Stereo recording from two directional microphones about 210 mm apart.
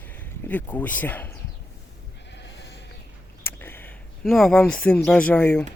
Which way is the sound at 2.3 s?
55° left (ahead or behind).